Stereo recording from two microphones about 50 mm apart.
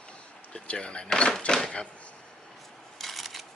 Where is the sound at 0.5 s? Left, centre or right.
Left.